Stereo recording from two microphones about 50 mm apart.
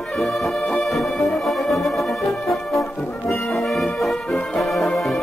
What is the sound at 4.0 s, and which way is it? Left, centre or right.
Brass instrument, centre.